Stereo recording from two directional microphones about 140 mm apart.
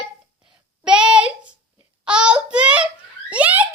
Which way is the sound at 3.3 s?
10° right (ahead or behind).